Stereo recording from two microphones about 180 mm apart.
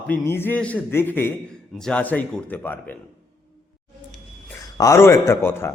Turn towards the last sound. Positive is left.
turn(degrees=15)  # may be behind; listen again after turning